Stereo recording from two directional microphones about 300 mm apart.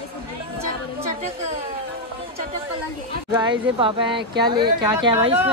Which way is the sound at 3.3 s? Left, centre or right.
Centre.